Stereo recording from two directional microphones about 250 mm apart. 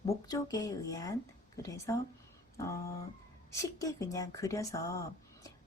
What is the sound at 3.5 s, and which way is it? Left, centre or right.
Speech, centre.